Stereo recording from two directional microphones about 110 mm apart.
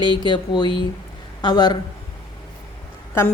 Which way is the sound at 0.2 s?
40° left (ahead or behind).